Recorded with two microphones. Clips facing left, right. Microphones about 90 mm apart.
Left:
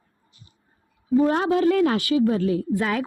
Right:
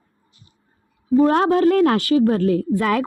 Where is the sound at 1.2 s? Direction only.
55° right (ahead or behind).